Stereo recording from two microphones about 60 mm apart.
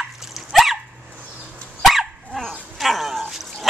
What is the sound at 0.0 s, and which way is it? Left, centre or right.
Dog, centre.